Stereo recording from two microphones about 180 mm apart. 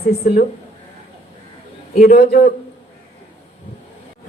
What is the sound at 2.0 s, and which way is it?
Speech, 55° left (ahead or behind).